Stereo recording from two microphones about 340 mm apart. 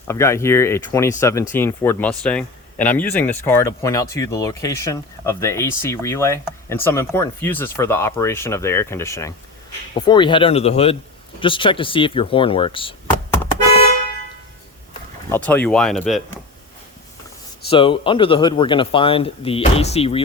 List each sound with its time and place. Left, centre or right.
0.1 s speech: centre
15.3 s speech: centre
17.7 s speech: centre